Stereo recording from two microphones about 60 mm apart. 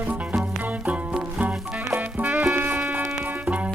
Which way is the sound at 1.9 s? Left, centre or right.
Right.